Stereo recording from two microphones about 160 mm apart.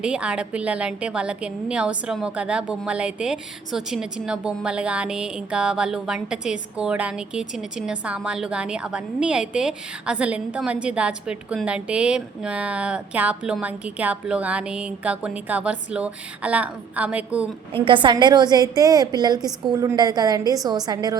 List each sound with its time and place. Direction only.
0.0 s a woman's voice: 5° right (ahead or behind)
17.8 s a woman's voice: 30° right (ahead or behind)